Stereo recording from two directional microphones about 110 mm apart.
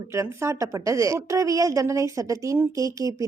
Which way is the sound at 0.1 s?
25° right (ahead or behind).